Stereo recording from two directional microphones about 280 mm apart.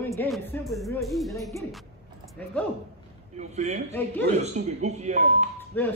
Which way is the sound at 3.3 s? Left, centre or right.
Right.